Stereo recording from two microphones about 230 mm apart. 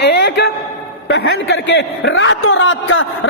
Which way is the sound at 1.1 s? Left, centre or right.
Left.